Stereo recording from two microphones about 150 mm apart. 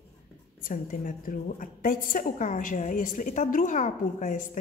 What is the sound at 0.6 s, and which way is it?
A woman's voice, 70° left (ahead or behind).